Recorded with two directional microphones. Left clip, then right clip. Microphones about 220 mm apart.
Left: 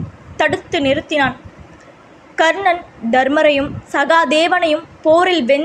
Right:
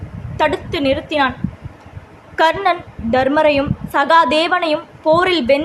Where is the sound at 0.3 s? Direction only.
5° left (ahead or behind).